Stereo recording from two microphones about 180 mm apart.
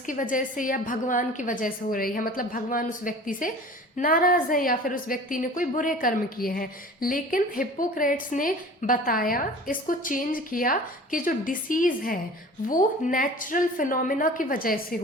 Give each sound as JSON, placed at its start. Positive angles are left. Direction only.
{"t": 0.0, "sound": "a woman's voice", "side_deg": 45}